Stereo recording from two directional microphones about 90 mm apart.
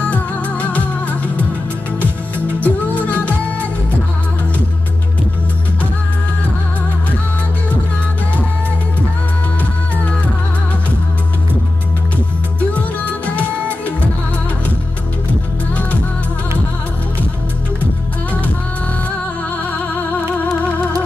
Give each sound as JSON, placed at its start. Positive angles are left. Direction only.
{"t": 0.0, "sound": "music", "side_deg": 15}
{"t": 2.6, "sound": "music", "side_deg": 20}
{"t": 9.6, "sound": "music", "side_deg": 15}
{"t": 15.7, "sound": "music", "side_deg": 15}
{"t": 19.6, "sound": "music", "side_deg": 20}